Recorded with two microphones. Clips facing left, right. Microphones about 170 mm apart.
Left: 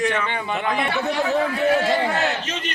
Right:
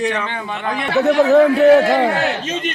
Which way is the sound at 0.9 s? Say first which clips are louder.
Right 15 dB; 70° right (ahead or behind).